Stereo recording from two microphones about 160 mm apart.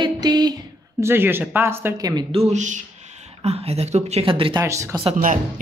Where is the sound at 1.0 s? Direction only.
15° right (ahead or behind).